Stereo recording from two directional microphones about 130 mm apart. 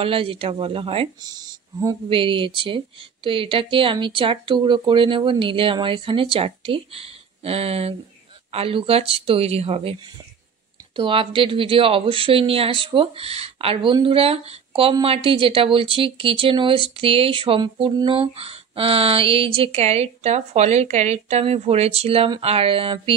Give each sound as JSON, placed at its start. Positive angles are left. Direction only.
{"t": 0.0, "sound": "speech", "side_deg": -45}
{"t": 1.2, "sound": "speech", "side_deg": -30}
{"t": 2.0, "sound": "speech", "side_deg": -40}
{"t": 11.0, "sound": "speech", "side_deg": -45}